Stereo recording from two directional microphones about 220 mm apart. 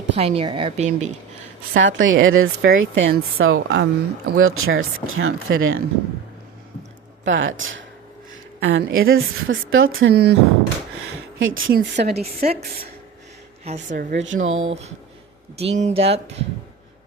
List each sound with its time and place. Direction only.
0.2 s a woman's voice: 25° right (ahead or behind)
1.7 s speech: 55° right (ahead or behind)
7.3 s speech: 60° right (ahead or behind)
8.3 s a sound: 50° right (ahead or behind)
9.1 s speech: 60° right (ahead or behind)
11.3 s speech: 60° right (ahead or behind)
11.8 s a woman's voice: 50° right (ahead or behind)
12.1 s a woman's voice: 30° right (ahead or behind)
13.7 s a woman's voice: 30° right (ahead or behind)
14.1 s speech: 55° right (ahead or behind)
14.7 s a woman's voice: 30° right (ahead or behind)